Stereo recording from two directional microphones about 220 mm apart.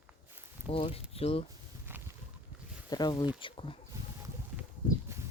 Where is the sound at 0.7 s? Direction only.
25° left (ahead or behind).